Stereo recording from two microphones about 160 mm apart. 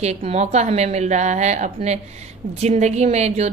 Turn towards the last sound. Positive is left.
turn(degrees=-45)  # may be behind; listen again after turning